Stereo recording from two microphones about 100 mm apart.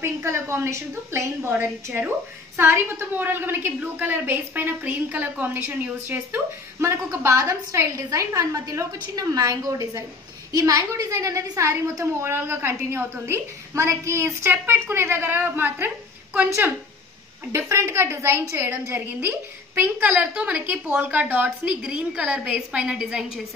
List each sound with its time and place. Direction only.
0.0 s a woman's voice: 25° right (ahead or behind)
17.5 s a woman's voice: 25° right (ahead or behind); by 23.4 s 5° right (ahead or behind)